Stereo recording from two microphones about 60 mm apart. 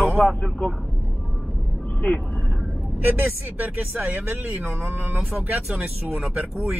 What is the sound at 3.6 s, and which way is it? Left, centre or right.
Speech, right.